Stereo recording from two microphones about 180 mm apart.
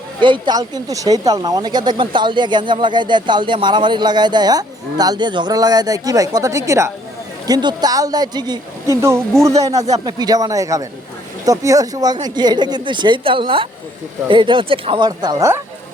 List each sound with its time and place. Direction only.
0.2 s speech: 25° right (ahead or behind)